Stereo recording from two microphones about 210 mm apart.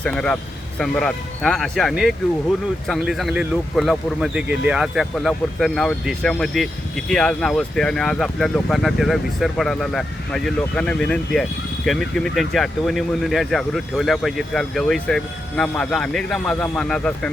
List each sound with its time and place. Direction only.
0.0 s speech: 5° left (ahead or behind)